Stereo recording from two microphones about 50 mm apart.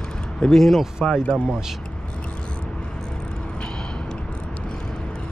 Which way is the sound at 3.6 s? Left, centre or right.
Centre.